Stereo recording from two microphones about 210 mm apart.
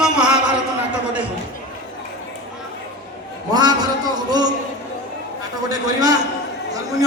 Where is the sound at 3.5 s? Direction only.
20° right (ahead or behind).